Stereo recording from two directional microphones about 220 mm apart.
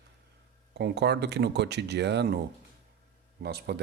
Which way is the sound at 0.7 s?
50° right (ahead or behind).